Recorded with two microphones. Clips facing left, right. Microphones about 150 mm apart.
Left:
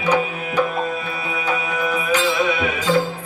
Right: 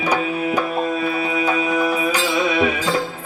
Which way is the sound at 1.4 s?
35° right (ahead or behind).